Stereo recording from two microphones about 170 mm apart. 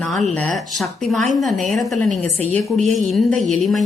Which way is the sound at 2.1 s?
40° right (ahead or behind).